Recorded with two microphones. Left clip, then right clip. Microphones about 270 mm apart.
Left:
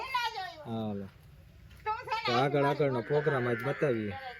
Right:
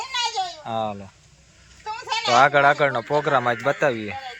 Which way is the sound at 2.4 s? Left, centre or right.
Centre.